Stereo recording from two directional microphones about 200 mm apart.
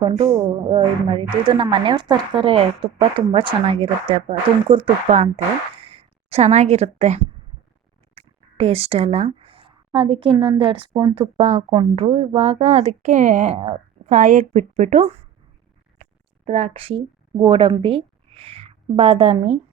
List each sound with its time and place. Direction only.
0.0 s a woman's voice: 25° right (ahead or behind)
16.5 s a woman's voice: 30° right (ahead or behind)